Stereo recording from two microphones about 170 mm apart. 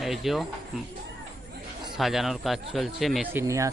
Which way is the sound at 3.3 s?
20° right (ahead or behind).